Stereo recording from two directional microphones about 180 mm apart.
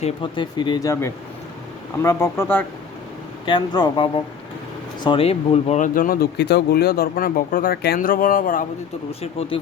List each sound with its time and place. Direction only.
0.0 s speech: 25° left (ahead or behind)
3.4 s speech: 25° left (ahead or behind); by 8.6 s 50° left (ahead or behind)
9.2 s speech: 35° left (ahead or behind)